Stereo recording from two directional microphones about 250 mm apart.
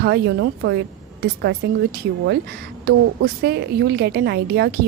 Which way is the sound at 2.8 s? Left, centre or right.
Right.